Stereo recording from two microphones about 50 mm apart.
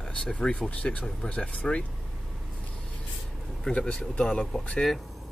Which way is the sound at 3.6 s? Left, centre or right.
Centre.